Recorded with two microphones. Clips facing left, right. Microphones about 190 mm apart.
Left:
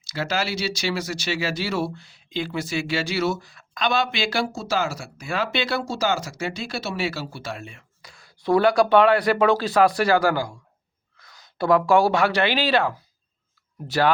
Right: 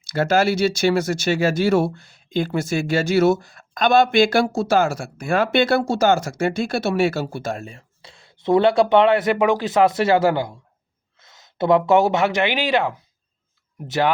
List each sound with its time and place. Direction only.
0.0 s speech: 50° right (ahead or behind); by 14.1 s 20° right (ahead or behind)